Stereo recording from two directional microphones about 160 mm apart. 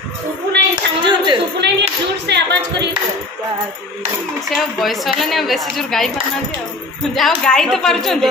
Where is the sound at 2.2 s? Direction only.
90° right.